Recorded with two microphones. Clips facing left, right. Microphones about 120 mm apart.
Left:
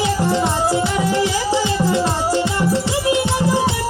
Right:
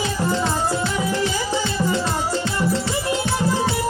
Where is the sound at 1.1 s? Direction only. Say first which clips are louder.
Left 4 dB; 80° left.